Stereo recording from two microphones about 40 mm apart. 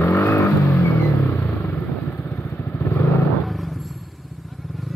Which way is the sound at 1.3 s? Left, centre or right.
Left.